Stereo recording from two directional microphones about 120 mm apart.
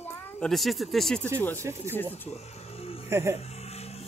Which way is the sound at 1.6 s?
20° right (ahead or behind).